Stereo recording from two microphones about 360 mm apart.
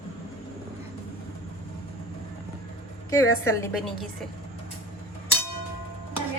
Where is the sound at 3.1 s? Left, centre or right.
Centre.